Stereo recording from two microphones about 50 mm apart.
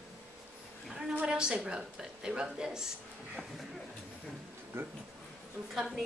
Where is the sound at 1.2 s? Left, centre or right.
Centre.